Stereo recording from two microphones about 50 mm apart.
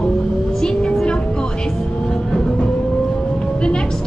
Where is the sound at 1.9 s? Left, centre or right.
Centre.